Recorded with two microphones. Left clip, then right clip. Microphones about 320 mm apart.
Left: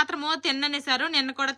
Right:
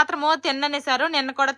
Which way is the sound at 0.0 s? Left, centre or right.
Centre.